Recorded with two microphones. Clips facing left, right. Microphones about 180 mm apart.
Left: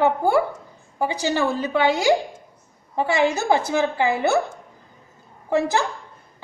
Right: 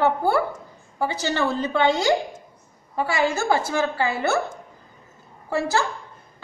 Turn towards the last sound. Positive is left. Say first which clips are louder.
# left 2 dB
turn(degrees=20)  # may be behind; listen again after turning